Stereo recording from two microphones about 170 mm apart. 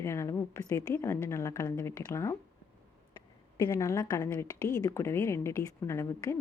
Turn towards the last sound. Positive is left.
turn(degrees=15)  # may be behind; listen again after turning